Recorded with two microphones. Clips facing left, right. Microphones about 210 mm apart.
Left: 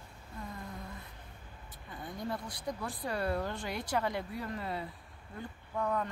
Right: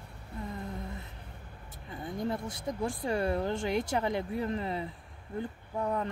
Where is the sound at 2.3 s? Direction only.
25° right (ahead or behind).